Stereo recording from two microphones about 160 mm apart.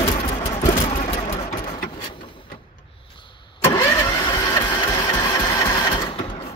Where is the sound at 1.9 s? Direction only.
30° left (ahead or behind).